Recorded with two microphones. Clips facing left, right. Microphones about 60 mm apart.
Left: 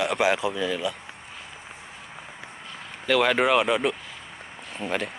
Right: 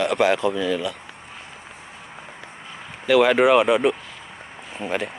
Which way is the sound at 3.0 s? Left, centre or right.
Centre.